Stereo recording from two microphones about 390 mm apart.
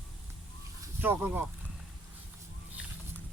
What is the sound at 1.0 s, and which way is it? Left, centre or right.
Speech, centre.